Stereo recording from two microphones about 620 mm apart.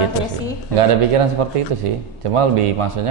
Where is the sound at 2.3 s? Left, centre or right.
Right.